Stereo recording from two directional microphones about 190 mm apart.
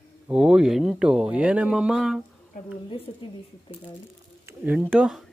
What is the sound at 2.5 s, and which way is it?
Speech, 45° left (ahead or behind).